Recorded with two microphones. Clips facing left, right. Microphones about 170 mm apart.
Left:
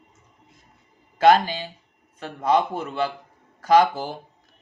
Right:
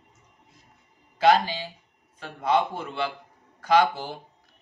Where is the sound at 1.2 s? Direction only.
50° left (ahead or behind).